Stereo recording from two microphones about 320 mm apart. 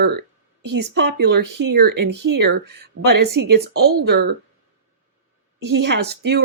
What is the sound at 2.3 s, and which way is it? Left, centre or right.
Speech, right.